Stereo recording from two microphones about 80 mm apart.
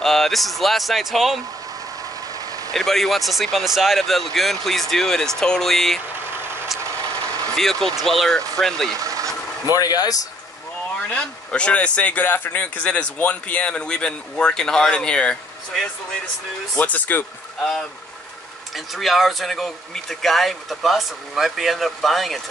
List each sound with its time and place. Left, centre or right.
0.0 s speech: centre
2.7 s speech: centre
7.5 s speech: centre
9.0 s vehicle: right
9.8 s speech: left
11.1 s speech: centre
18.9 s speech: centre